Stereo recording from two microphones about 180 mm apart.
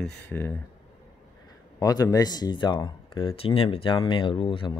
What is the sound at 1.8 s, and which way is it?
Speech, 20° left (ahead or behind).